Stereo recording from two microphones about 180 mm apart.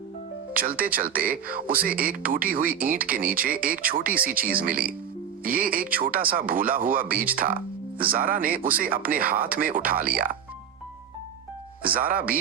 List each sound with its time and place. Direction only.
0.5 s speech: 50° right (ahead or behind)
11.8 s speech: 55° right (ahead or behind)